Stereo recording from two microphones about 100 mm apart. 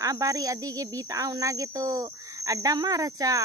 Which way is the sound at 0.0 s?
35° right (ahead or behind).